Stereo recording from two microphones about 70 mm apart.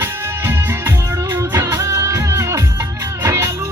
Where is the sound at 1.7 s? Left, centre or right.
Right.